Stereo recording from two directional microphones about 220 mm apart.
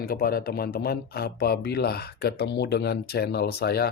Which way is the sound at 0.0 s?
45° left (ahead or behind).